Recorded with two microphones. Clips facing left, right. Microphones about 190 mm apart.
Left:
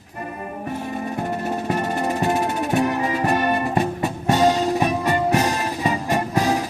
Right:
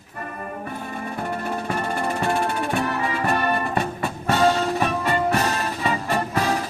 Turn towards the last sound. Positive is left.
turn(degrees=15)  # may be behind; listen again after turning